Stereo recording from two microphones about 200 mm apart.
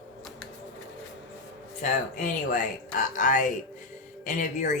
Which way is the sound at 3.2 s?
40° left (ahead or behind).